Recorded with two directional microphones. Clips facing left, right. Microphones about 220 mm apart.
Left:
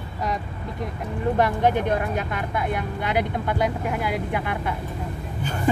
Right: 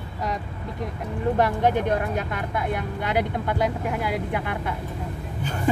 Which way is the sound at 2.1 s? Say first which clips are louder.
Left 1 dB; 40° right (ahead or behind).